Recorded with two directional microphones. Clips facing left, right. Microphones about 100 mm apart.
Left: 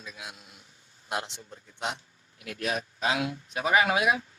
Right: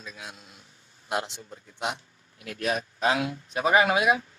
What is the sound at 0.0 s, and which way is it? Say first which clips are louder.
A man's voice: right 1 dB; 5° left (ahead or behind).